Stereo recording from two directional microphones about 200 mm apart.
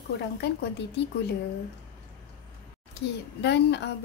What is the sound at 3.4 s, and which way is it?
Speech, 60° left (ahead or behind).